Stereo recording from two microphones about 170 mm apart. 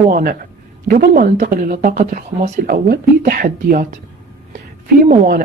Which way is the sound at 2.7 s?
65° right (ahead or behind).